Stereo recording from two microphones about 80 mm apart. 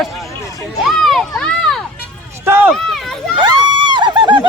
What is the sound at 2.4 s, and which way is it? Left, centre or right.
Run, right.